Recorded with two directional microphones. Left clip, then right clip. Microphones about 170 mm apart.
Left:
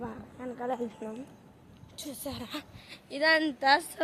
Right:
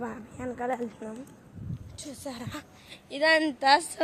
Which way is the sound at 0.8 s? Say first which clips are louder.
Even; 10° left (ahead or behind).